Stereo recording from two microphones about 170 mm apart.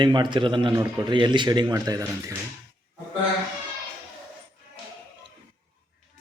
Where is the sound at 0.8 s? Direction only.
20° right (ahead or behind).